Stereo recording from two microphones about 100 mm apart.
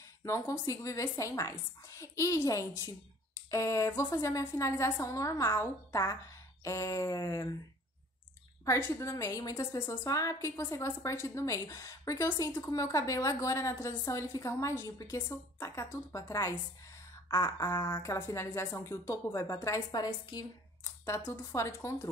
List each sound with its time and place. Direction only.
0.2 s a woman's voice: 30° left (ahead or behind)
8.6 s a woman's voice: 30° left (ahead or behind)
21.0 s a woman's voice: 30° left (ahead or behind)